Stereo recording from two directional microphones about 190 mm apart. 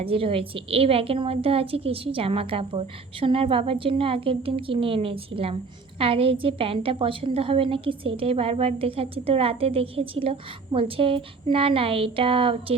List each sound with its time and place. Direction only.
0.0 s a woman's voice: 30° right (ahead or behind)